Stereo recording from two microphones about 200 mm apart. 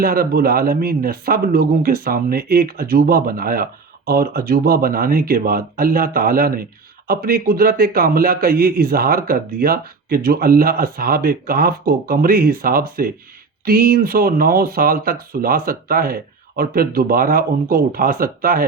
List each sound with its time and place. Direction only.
0.0 s speech: 45° right (ahead or behind)